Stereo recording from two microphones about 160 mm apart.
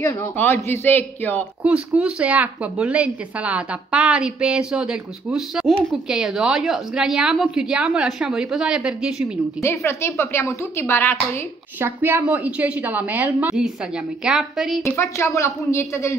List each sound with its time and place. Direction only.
0.0 s a woman's voice: 15° left (ahead or behind)
1.6 s a woman's voice: 5° right (ahead or behind)
9.6 s a woman's voice: 15° left (ahead or behind)
11.8 s a woman's voice: 10° right (ahead or behind)
14.8 s a woman's voice: 15° left (ahead or behind)